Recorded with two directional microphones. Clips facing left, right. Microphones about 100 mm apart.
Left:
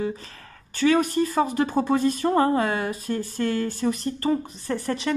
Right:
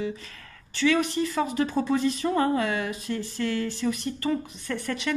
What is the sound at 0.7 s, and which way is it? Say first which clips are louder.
Speech: left 3 dB; 45° left (ahead or behind).